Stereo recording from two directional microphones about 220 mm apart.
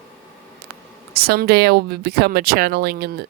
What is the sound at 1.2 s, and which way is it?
Speech, 45° right (ahead or behind).